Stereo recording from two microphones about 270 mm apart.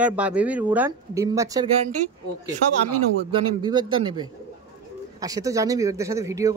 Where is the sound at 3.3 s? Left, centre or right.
Centre.